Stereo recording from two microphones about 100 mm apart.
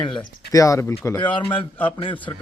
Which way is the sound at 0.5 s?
35° left (ahead or behind).